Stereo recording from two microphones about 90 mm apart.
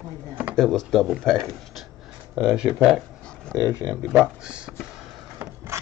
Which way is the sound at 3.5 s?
35° right (ahead or behind).